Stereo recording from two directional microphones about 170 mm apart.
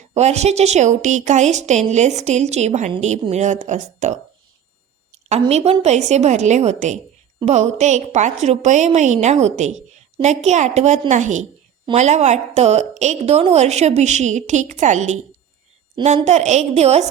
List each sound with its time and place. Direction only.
0.1 s a woman's voice: 40° right (ahead or behind)
5.5 s a woman's voice: 40° right (ahead or behind)